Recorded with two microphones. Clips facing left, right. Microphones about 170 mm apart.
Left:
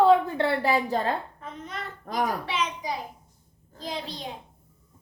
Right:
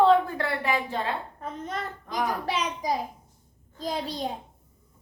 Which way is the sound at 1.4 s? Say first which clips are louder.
Right 4 dB; 40° right (ahead or behind).